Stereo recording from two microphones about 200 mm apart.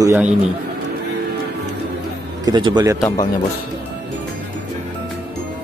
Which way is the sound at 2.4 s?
20° right (ahead or behind).